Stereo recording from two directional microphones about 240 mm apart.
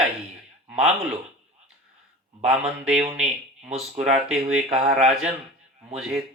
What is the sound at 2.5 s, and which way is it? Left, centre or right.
Speech, centre.